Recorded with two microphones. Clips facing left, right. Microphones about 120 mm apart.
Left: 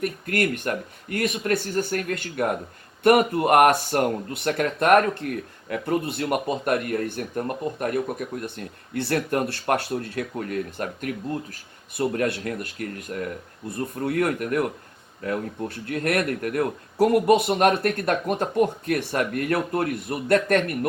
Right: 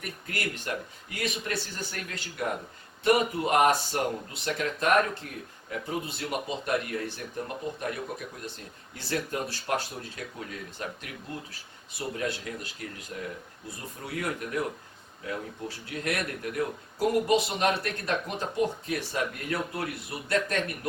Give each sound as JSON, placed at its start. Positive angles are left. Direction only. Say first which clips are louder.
{"t": 0.0, "sound": "speech", "louder": "left 10 dB", "side_deg": 55}